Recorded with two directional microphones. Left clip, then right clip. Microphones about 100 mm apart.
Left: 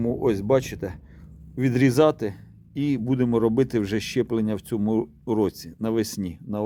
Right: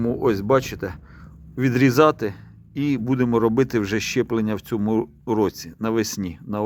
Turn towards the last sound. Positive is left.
turn(degrees=15)  # may be behind; listen again after turning